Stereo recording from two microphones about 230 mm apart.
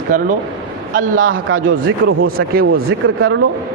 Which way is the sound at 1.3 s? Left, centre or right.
Right.